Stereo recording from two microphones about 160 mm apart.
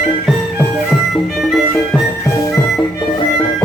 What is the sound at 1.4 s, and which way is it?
Music, centre (ahead or behind).